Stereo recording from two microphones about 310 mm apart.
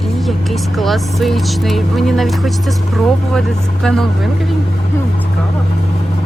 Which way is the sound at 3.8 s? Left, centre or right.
Centre.